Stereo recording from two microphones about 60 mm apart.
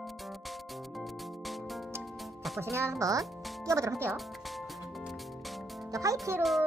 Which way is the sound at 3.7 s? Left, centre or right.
Right.